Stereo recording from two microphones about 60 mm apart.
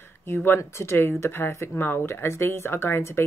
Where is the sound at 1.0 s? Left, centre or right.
Left.